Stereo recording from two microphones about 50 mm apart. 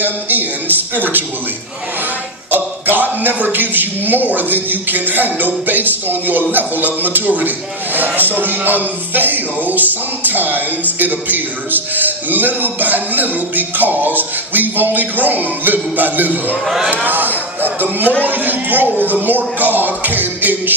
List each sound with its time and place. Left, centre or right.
0.0 s a man's voice: right
2.5 s a man's voice: right
16.6 s speech: centre
16.9 s a man's voice: right